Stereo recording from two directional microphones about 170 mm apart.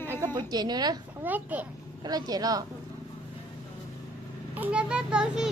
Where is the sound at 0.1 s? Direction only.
20° right (ahead or behind).